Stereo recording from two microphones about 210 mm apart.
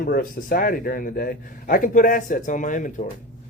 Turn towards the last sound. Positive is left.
turn(degrees=40)  # may be behind; listen again after turning